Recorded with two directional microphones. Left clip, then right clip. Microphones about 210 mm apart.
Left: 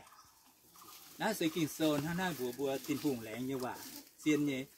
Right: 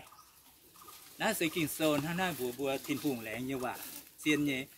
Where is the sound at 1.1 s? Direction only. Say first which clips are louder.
Right 3 dB; 5° right (ahead or behind).